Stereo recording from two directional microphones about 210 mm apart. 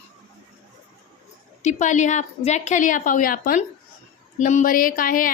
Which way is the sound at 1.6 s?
35° left (ahead or behind).